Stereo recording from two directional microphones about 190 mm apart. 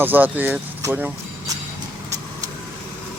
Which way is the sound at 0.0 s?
10° right (ahead or behind).